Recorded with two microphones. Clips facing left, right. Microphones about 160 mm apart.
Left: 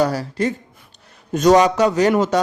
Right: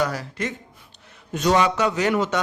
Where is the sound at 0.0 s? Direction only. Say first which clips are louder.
Left 6 dB; 35° left (ahead or behind).